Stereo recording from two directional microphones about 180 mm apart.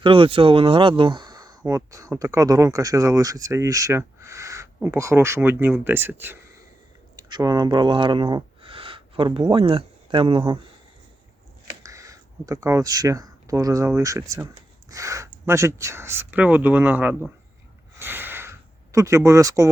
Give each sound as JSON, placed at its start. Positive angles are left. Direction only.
{"t": 0.0, "sound": "speech", "side_deg": -30}
{"t": 7.2, "sound": "speech", "side_deg": -20}
{"t": 11.8, "sound": "speech", "side_deg": -20}
{"t": 17.9, "sound": "a sound", "side_deg": -10}